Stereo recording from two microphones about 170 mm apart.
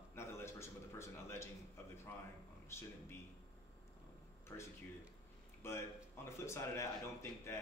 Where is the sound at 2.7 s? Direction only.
15° left (ahead or behind).